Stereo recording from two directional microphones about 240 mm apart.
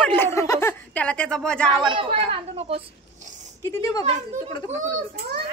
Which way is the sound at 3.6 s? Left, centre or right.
Centre.